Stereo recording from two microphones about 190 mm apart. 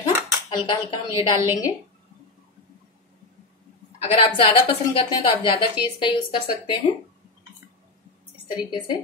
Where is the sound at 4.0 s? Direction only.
30° left (ahead or behind).